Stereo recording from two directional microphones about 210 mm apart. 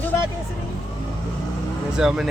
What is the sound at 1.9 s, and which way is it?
Speech, 5° right (ahead or behind).